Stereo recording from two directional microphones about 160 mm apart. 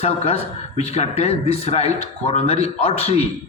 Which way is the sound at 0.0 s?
40° left (ahead or behind).